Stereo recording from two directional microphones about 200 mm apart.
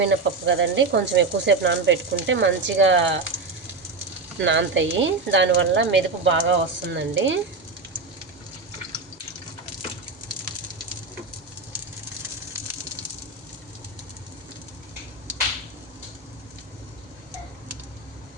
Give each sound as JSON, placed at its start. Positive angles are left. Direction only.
{"t": 0.0, "sound": "speech", "side_deg": -65}
{"t": 4.4, "sound": "speech", "side_deg": -65}